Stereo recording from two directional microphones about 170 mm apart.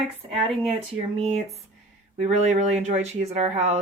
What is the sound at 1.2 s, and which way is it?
Speech, 40° right (ahead or behind).